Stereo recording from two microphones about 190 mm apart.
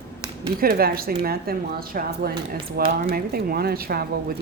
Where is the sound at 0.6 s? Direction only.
50° right (ahead or behind).